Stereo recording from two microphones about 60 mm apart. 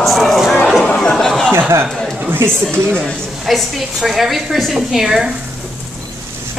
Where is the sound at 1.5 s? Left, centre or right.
Right.